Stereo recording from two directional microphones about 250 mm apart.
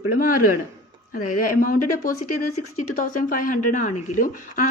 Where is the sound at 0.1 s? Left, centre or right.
Left.